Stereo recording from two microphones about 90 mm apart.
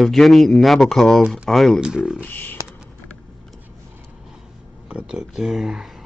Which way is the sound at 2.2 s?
20° left (ahead or behind).